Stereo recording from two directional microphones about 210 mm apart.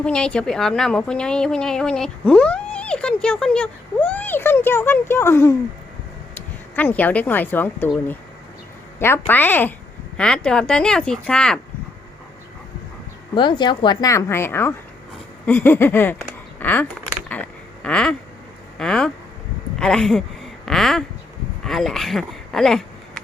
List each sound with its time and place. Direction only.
0.0 s a woman's voice: 5° left (ahead or behind)
13.3 s speech: 20° left (ahead or behind)
17.2 s a sound: 5° left (ahead or behind)
18.8 s a woman's voice: 5° left (ahead or behind)